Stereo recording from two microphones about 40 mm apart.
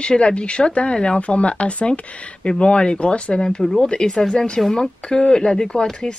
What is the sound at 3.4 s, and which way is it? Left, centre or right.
Speech, centre.